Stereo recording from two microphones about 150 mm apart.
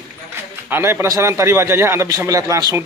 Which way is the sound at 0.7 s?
15° right (ahead or behind).